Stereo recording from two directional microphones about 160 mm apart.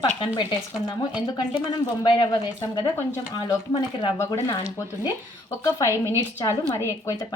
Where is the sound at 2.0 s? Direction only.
30° left (ahead or behind).